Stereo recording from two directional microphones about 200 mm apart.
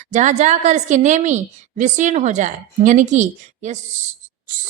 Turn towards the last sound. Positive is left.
turn(degrees=-35)  # may be behind; listen again after turning